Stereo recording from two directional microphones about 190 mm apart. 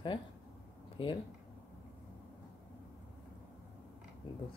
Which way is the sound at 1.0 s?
25° left (ahead or behind).